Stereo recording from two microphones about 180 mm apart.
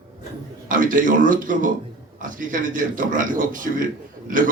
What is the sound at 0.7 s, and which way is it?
A man's voice, 50° right (ahead or behind).